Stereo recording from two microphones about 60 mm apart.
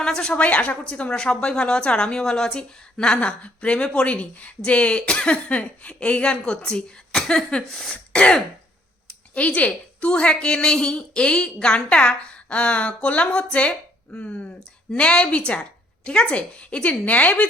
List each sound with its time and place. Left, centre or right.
0.0 s speech: centre
7.9 s throat clearing: centre
9.3 s a woman's voice: left